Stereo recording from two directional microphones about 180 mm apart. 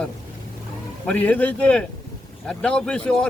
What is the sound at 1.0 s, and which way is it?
Speech, 5° left (ahead or behind).